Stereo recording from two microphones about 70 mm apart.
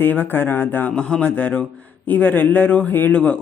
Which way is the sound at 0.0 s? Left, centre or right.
Left.